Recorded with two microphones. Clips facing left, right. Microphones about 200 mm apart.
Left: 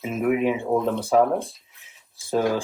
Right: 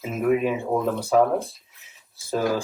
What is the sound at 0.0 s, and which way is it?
Speech, centre (ahead or behind).